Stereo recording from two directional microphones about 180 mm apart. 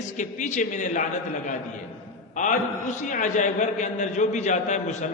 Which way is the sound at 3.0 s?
45° left (ahead or behind).